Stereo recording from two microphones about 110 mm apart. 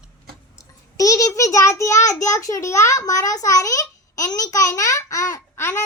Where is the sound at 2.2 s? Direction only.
30° left (ahead or behind).